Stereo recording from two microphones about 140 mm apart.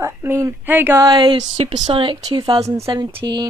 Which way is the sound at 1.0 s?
35° right (ahead or behind).